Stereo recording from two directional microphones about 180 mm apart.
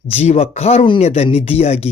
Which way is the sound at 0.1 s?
35° left (ahead or behind).